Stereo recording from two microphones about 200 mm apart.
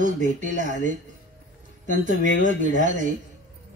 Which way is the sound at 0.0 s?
40° right (ahead or behind).